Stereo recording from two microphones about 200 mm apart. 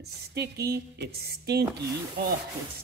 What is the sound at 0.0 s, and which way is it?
Speech, 55° right (ahead or behind).